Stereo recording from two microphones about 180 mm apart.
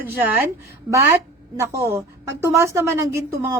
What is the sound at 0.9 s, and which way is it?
A woman's voice, 15° right (ahead or behind).